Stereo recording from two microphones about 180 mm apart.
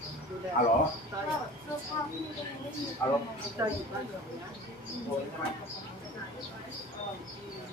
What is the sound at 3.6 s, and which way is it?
Speech, 15° right (ahead or behind).